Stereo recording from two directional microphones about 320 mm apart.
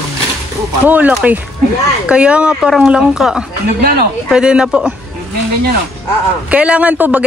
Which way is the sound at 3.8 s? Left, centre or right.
Right.